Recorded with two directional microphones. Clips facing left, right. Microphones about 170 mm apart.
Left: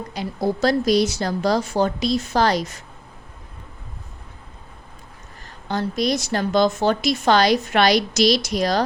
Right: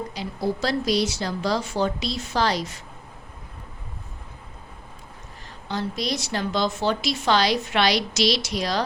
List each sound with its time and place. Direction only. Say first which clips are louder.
0.1 s a woman's voice: left 8 dB; 50° left (ahead or behind)
5.6 s a woman's voice: left 5 dB; 50° left (ahead or behind)